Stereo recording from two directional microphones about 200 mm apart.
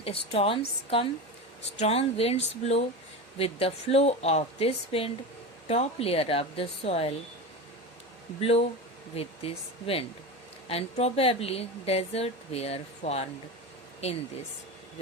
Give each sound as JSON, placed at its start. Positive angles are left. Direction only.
{"t": 0.0, "sound": "a woman's voice", "side_deg": 30}
{"t": 8.4, "sound": "a woman's voice", "side_deg": 30}